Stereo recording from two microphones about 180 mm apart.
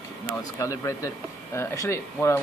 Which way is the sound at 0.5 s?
15° left (ahead or behind).